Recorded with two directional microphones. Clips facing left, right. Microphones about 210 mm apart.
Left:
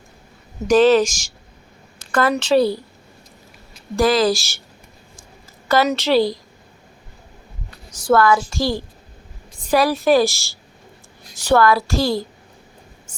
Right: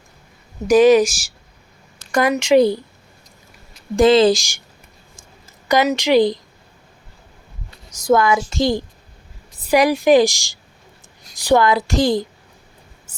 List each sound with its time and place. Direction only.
0.7 s a woman's voice: 10° right (ahead or behind)
2.1 s a woman's voice: 10° right (ahead or behind)
3.9 s a woman's voice: 25° right (ahead or behind)
5.6 s a woman's voice: 15° right (ahead or behind)
8.1 s a woman's voice: 15° right (ahead or behind)